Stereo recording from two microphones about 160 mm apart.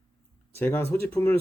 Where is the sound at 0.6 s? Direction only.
15° left (ahead or behind).